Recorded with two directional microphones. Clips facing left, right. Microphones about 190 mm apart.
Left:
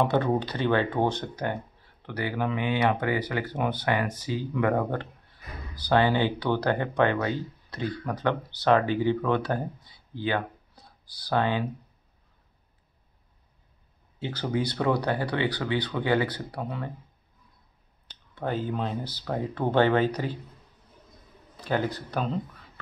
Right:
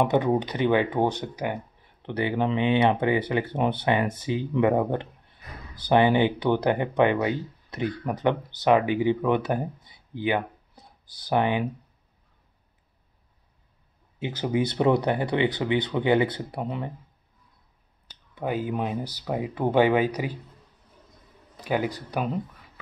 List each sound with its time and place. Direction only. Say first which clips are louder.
0.0 s speech: right 2 dB; 15° right (ahead or behind)
14.2 s speech: right 3 dB; 20° right (ahead or behind)
18.3 s speech: right 2 dB; 10° right (ahead or behind)
21.5 s speech: right 1 dB; 15° right (ahead or behind)